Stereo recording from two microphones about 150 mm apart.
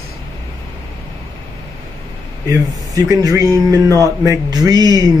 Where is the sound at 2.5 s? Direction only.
20° right (ahead or behind).